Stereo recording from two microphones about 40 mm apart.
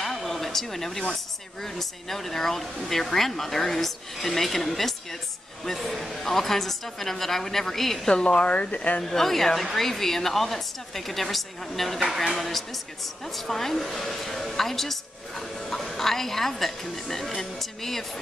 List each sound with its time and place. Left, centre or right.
0.0 s a sound: centre
1.6 s a woman's voice: centre
8.1 s speech: left
8.5 s speech: left
9.0 s a woman's voice: centre